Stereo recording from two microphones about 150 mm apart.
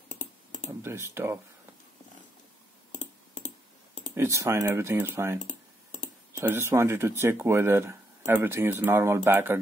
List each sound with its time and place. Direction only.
0.1 s typing: 55° left (ahead or behind)
0.7 s speech: 15° right (ahead or behind)
3.0 s a sound: 55° left (ahead or behind)
4.1 s speech: 20° right (ahead or behind)
5.4 s typing: 60° left (ahead or behind)
6.4 s speech: 15° right (ahead or behind)